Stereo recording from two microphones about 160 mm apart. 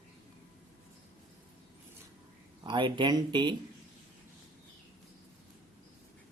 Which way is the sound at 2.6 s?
30° right (ahead or behind).